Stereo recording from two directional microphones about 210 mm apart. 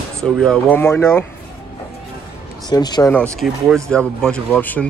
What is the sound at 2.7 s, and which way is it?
Speech, 20° left (ahead or behind).